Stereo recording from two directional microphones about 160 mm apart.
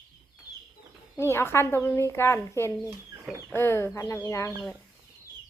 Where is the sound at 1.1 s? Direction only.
15° left (ahead or behind).